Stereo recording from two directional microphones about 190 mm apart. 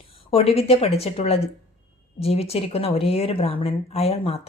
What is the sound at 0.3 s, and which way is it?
Speech, 30° left (ahead or behind).